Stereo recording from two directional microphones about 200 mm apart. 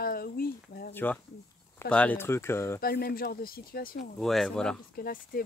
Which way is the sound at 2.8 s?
50° left (ahead or behind).